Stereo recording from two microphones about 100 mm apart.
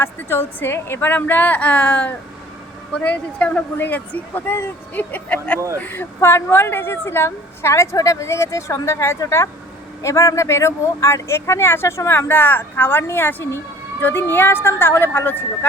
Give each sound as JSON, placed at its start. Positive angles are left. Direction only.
{"t": 0.0, "sound": "a woman's voice", "side_deg": 20}